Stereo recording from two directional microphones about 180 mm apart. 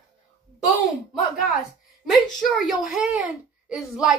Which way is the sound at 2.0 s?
Centre (ahead or behind).